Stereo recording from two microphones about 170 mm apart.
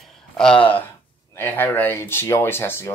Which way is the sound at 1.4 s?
15° left (ahead or behind).